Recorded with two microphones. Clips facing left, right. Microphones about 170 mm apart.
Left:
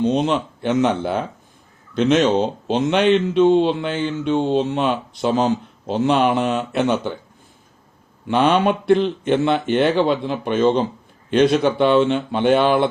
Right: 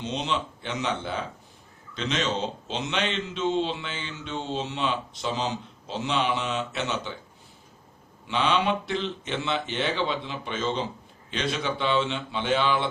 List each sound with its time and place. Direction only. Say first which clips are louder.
0.0 s speech: left 11 dB; 50° left (ahead or behind)
8.3 s speech: left 8 dB; 50° left (ahead or behind)